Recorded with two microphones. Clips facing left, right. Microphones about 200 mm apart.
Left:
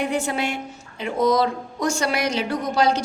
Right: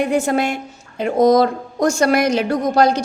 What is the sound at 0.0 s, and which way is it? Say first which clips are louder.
A woman's voice: right 6 dB; 45° right (ahead or behind).